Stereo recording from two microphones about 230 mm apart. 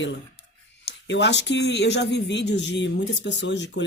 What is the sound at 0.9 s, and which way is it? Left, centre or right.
Speech, left.